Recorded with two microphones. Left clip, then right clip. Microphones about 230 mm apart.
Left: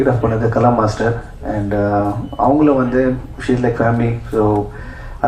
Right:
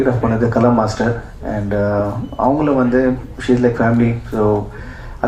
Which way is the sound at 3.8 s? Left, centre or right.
Right.